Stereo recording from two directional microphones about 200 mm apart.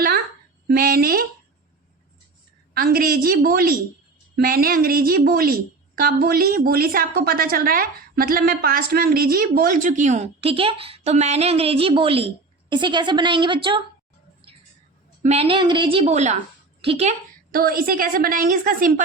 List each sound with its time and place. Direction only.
0.7 s a woman's voice: 50° right (ahead or behind)
2.7 s a woman's voice: 50° right (ahead or behind); by 13.8 s 25° right (ahead or behind)
15.2 s a woman's voice: 30° right (ahead or behind)
17.5 s a woman's voice: 45° right (ahead or behind)